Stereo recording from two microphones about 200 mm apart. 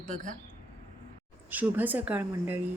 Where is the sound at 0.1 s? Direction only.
40° right (ahead or behind).